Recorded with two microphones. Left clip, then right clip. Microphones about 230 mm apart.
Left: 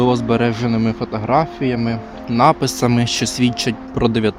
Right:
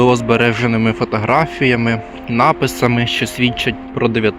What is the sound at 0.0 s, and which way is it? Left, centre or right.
Speech, centre.